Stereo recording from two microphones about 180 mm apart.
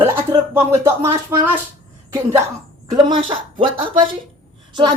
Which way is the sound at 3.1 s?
30° right (ahead or behind).